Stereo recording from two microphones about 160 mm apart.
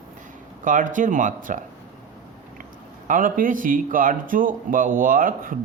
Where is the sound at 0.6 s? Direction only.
55° right (ahead or behind).